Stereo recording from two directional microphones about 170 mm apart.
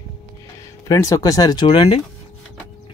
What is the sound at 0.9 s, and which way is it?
Speech, 20° left (ahead or behind).